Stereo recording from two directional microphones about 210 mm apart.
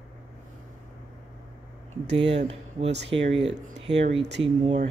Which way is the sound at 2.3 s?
30° right (ahead or behind).